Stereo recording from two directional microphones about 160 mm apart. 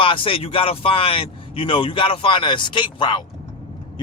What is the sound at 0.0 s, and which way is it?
A man's voice, 35° left (ahead or behind).